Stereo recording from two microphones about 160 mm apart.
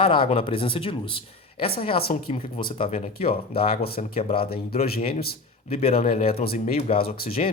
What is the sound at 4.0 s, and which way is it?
Speech, 40° left (ahead or behind).